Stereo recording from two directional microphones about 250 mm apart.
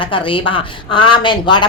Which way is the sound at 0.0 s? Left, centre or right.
Centre.